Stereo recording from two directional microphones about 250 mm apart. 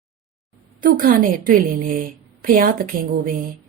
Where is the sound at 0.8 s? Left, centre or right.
Right.